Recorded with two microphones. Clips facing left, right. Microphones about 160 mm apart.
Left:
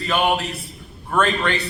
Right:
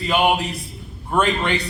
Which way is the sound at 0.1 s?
15° right (ahead or behind).